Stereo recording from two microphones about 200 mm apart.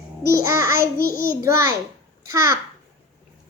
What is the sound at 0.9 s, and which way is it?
Child singing, 45° left (ahead or behind).